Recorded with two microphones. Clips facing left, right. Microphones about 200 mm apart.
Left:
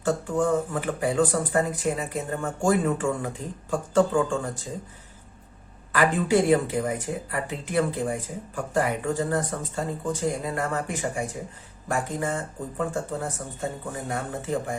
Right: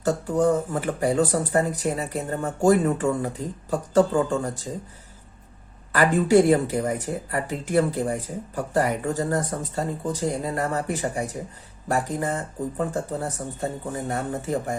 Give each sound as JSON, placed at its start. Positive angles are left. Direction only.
{"t": 0.0, "sound": "speech", "side_deg": -40}
{"t": 5.9, "sound": "speech", "side_deg": -40}